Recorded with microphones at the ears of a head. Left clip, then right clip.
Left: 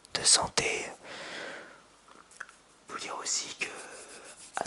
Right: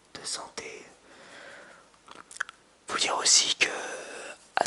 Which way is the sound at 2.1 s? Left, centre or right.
Right.